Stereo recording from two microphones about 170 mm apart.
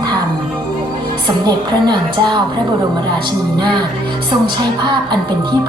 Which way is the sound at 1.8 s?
25° right (ahead or behind).